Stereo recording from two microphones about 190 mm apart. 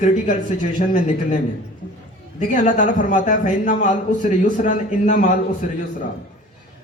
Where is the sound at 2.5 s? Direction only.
40° left (ahead or behind).